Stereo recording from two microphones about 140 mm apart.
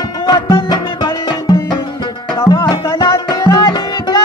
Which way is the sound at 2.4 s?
30° left (ahead or behind).